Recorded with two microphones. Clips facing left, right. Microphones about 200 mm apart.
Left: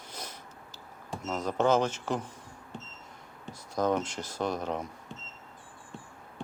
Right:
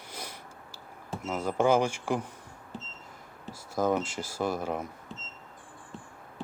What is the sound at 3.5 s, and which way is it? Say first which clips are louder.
Speech: right 1 dB; 5° right (ahead or behind).